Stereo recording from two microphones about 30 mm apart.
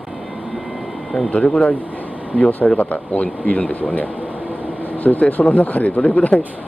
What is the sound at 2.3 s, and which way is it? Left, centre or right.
Speech, left.